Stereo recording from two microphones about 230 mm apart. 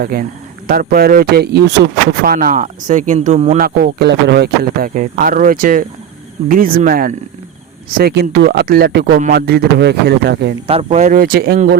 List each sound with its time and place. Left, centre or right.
0.0 s speech: right
10.7 s speech: right